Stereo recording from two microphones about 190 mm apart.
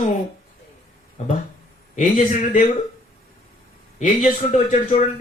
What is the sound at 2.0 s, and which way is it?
Speech, 35° left (ahead or behind).